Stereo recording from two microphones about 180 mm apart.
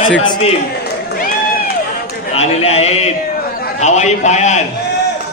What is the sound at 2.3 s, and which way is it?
A man's voice, 35° left (ahead or behind).